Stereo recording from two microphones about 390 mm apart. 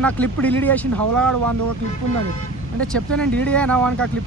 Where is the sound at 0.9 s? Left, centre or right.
Right.